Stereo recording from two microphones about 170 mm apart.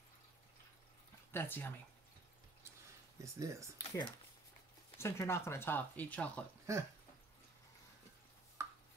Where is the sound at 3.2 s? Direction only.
20° right (ahead or behind).